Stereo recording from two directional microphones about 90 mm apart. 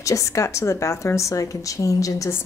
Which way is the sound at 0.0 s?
35° left (ahead or behind).